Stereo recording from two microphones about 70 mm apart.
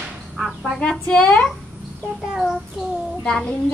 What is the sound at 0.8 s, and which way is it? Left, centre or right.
Speech, centre.